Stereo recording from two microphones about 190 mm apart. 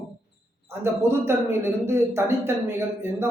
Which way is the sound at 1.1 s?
15° right (ahead or behind).